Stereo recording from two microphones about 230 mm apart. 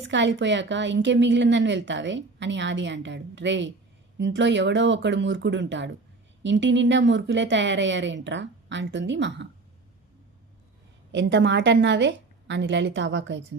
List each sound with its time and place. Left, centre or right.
0.1 s a woman's voice: right
11.1 s a woman's voice: right